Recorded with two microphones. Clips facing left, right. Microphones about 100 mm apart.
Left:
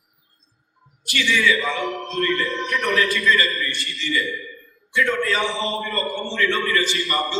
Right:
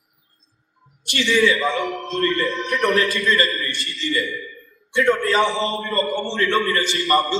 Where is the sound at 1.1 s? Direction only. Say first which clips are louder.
Right 2 dB; 30° right (ahead or behind).